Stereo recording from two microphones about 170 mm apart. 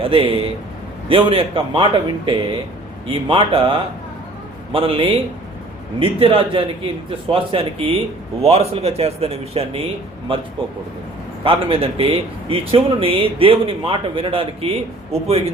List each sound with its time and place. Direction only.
0.0 s speech: 30° right (ahead or behind)